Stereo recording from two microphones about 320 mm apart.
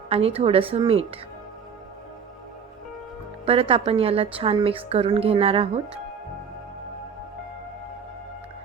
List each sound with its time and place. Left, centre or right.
0.1 s a woman's voice: centre
3.4 s a woman's voice: centre